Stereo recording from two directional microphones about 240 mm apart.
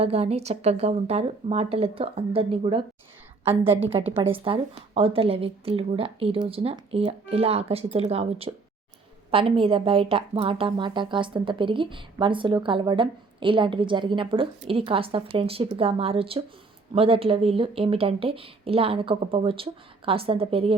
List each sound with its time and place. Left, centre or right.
0.0 s a woman's voice: right
3.9 s a woman's voice: right